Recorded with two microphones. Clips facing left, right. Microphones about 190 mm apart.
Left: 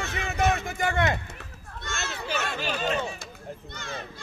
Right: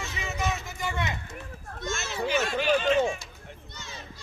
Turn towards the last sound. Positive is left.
turn(degrees=55)  # may be behind; listen again after turning